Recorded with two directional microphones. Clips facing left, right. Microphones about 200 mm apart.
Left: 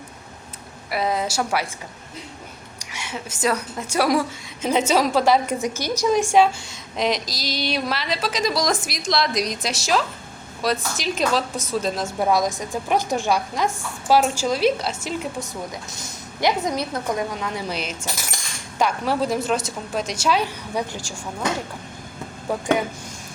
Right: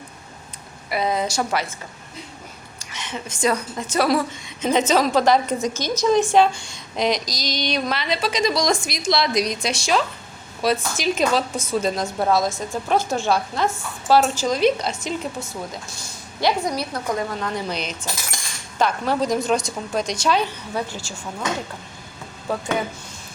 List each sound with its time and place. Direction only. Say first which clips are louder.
0.9 s a woman's voice: right 1 dB; centre (ahead or behind)
2.7 s a woman's voice: right 1 dB; 10° left (ahead or behind)
12.2 s speech: even; 15° left (ahead or behind)
17.4 s speech: right 1 dB; 10° left (ahead or behind)
22.5 s speech: even; 15° left (ahead or behind)